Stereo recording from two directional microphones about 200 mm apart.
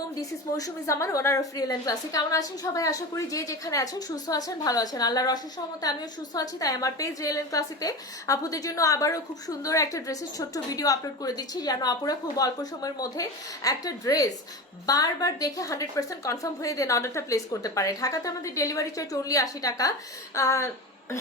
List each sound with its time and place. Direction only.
0.2 s a woman's voice: 15° left (ahead or behind)